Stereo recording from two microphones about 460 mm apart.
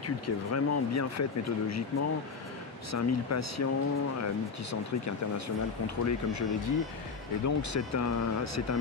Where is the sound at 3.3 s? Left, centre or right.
Left.